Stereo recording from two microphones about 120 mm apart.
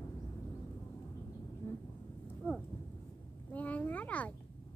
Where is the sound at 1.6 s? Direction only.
20° left (ahead or behind).